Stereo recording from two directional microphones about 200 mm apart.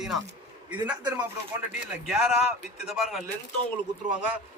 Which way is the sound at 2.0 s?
5° right (ahead or behind).